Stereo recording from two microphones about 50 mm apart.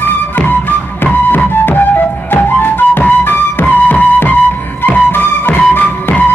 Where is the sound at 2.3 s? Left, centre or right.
Left.